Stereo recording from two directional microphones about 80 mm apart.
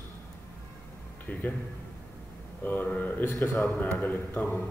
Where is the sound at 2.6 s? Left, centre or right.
Left.